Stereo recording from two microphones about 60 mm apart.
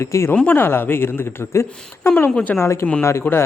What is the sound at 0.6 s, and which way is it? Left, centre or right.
Speech, left.